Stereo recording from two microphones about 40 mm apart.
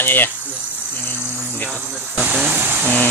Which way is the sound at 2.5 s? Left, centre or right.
Right.